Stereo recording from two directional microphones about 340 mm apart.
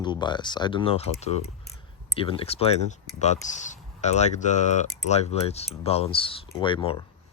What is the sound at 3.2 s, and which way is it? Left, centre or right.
Speech, left.